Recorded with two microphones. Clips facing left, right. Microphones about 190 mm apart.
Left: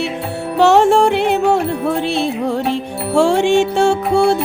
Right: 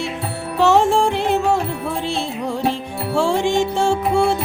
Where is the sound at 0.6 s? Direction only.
70° left (ahead or behind).